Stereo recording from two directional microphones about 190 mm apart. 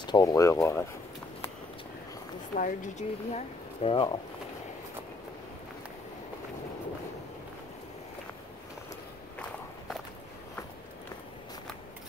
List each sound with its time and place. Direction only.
0.0 s speech: 20° left (ahead or behind)
2.5 s speech: 45° left (ahead or behind); by 4.2 s 25° left (ahead or behind)